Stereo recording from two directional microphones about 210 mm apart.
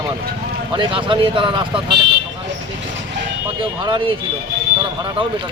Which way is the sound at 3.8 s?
25° right (ahead or behind).